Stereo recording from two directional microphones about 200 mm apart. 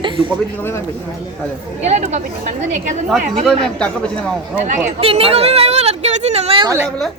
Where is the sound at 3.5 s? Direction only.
5° left (ahead or behind).